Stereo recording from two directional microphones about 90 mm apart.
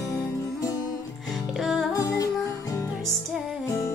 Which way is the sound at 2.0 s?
45° left (ahead or behind).